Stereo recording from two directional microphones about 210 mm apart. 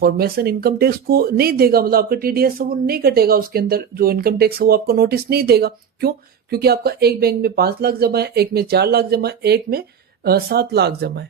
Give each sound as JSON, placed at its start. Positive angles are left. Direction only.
{"t": 0.0, "sound": "speech", "side_deg": -45}